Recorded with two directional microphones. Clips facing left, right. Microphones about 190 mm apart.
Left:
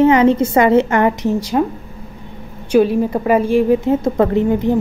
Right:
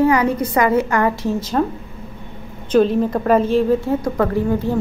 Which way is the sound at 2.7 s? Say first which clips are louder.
Left 2 dB; 10° left (ahead or behind).